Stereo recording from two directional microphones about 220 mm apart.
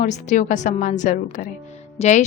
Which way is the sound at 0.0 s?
35° left (ahead or behind).